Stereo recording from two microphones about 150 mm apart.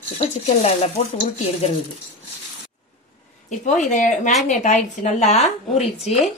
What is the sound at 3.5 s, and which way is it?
Speech, 55° left (ahead or behind).